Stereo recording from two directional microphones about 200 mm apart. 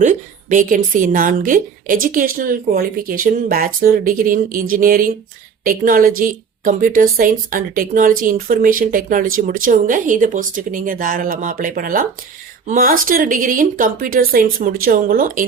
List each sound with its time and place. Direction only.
0.0 s a woman's voice: 40° right (ahead or behind)